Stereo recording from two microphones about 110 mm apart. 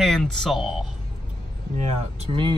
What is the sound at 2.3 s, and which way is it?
Speech, 50° right (ahead or behind).